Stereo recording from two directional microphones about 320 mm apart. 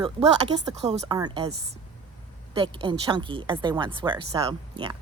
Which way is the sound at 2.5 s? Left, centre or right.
Centre.